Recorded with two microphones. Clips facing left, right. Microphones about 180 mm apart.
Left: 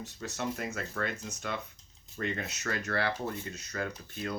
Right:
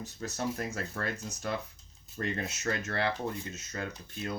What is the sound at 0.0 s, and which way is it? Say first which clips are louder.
Speech: right 1 dB; 40° right (ahead or behind).